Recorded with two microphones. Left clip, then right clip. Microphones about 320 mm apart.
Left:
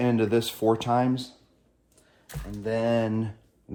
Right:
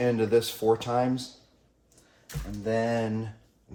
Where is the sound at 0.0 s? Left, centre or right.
Left.